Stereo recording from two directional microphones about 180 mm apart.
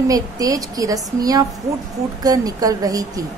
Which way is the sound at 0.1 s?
20° right (ahead or behind).